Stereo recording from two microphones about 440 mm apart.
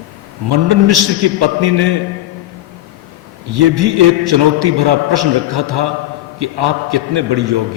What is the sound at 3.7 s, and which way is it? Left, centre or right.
A man's voice, right.